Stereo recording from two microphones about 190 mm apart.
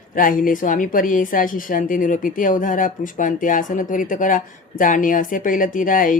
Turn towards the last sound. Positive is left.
turn(degrees=45)  # may be behind; listen again after turning